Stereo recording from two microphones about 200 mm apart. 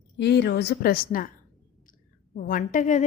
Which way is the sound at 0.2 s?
55° left (ahead or behind).